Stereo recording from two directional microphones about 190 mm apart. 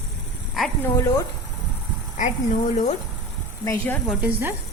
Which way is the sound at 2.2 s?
40° left (ahead or behind).